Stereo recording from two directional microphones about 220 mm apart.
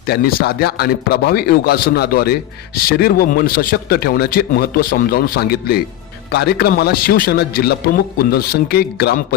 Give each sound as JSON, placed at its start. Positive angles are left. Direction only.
{"t": 0.1, "sound": "speech", "side_deg": 45}